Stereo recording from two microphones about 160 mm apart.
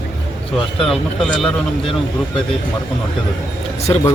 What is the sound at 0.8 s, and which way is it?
Speech, centre (ahead or behind).